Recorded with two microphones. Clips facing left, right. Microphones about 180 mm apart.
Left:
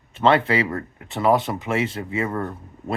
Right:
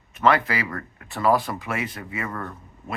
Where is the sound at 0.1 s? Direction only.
25° left (ahead or behind).